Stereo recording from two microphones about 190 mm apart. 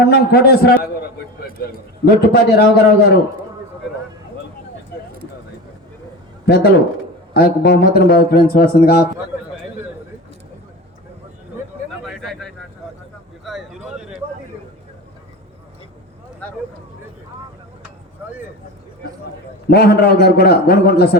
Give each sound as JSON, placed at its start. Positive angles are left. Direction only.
{"t": 0.0, "sound": "a man's voice", "side_deg": 55}
{"t": 2.0, "sound": "a man's voice", "side_deg": 55}
{"t": 6.4, "sound": "a man's voice", "side_deg": 60}
{"t": 12.0, "sound": "bird", "side_deg": 0}
{"t": 13.4, "sound": "a sound", "side_deg": 0}
{"t": 19.7, "sound": "a man's voice", "side_deg": 55}